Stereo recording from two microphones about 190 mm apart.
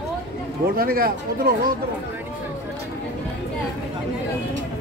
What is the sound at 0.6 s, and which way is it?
Speech, 50° right (ahead or behind).